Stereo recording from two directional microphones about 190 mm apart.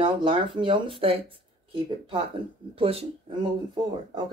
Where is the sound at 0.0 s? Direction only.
25° right (ahead or behind).